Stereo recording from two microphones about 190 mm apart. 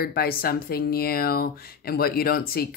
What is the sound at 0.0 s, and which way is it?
Speech, 50° left (ahead or behind).